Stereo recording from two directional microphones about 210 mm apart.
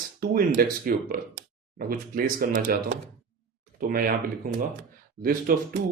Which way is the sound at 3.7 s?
45° right (ahead or behind).